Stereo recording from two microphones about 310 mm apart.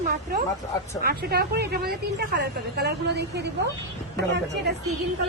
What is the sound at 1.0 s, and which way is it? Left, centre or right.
A woman's voice, right.